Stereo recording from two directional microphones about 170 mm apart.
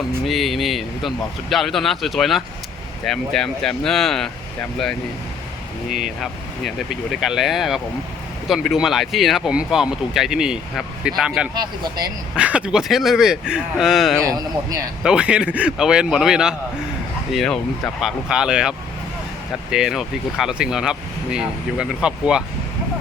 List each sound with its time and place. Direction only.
0.3 s speech: centre (ahead or behind)
6.7 s speech: centre (ahead or behind)
11.5 s speech: 25° right (ahead or behind)
12.4 s speech: 5° right (ahead or behind)
14.3 s speech: 20° right (ahead or behind)
15.0 s speech: 5° right (ahead or behind)
19.7 s speech: 5° right (ahead or behind)